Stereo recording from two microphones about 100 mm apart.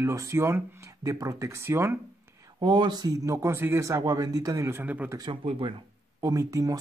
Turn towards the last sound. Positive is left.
turn(degrees=-35)  # may be behind; listen again after turning